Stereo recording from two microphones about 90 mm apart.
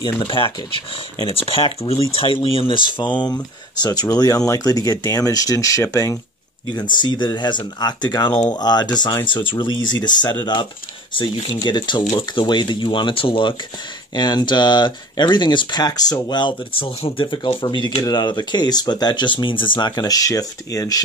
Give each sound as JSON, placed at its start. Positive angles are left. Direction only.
{"t": 0.2, "sound": "speech", "side_deg": 75}
{"t": 6.8, "sound": "speech", "side_deg": 55}
{"t": 14.1, "sound": "speech", "side_deg": 55}
{"t": 16.7, "sound": "speech", "side_deg": 80}